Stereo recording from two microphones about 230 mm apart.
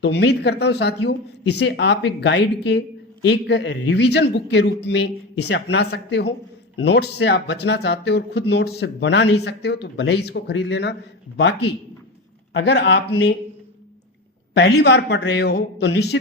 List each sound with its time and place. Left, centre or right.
0.0 s speech: left
14.5 s speech: left